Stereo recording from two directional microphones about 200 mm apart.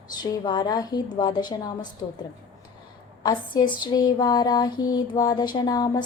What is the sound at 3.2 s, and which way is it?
Speech, 20° left (ahead or behind).